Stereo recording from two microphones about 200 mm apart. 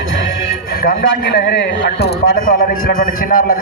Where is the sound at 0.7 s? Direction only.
45° left (ahead or behind).